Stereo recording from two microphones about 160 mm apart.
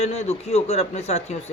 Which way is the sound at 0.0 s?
40° left (ahead or behind).